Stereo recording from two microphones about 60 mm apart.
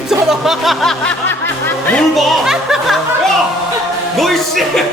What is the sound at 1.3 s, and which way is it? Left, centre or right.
Music, left.